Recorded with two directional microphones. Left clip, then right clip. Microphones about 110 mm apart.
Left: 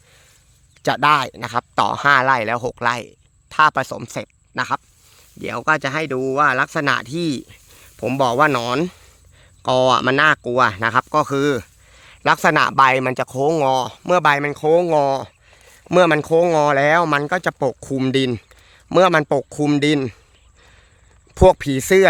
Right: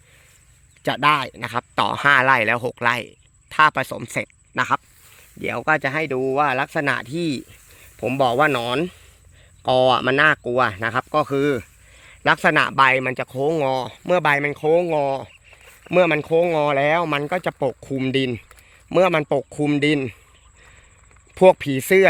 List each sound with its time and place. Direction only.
0.8 s speech: 20° left (ahead or behind)
2.0 s speech: centre (ahead or behind)
5.4 s speech: 5° left (ahead or behind)
5.6 s speech: 20° left (ahead or behind)
6.1 s speech: 35° left (ahead or behind)
11.9 s a sound: 20° left (ahead or behind)
12.8 s speech: 30° left (ahead or behind); by 14.4 s 10° left (ahead or behind)
14.4 s speech: 30° left (ahead or behind)
14.8 s speech: 55° left (ahead or behind)
15.9 s speech: 40° left (ahead or behind)
17.7 s speech: 45° left (ahead or behind)
18.1 s speech: 35° left (ahead or behind)
21.3 s speech: 30° left (ahead or behind)